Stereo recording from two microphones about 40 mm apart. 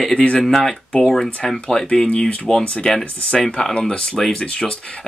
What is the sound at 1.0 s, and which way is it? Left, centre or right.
Speech, centre.